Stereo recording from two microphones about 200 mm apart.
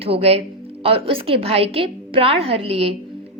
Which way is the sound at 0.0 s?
30° right (ahead or behind).